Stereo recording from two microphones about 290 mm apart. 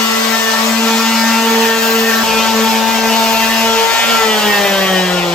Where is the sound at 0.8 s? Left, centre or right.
Centre.